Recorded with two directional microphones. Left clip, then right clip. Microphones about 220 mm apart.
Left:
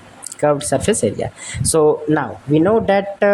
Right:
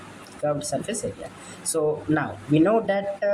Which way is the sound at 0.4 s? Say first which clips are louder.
Left 10 dB; 35° left (ahead or behind).